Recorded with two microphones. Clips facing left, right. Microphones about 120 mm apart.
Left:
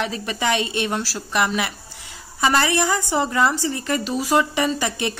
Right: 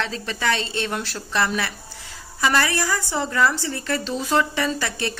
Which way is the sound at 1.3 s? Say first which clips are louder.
Left 2 dB; 15° left (ahead or behind).